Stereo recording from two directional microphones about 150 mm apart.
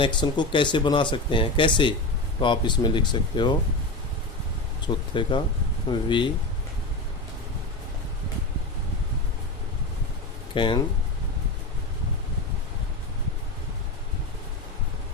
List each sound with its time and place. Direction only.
0.0 s speech: 30° left (ahead or behind)
4.8 s speech: 30° left (ahead or behind)
10.5 s speech: 30° left (ahead or behind)